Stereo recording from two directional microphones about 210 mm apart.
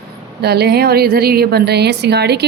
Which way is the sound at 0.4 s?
50° right (ahead or behind).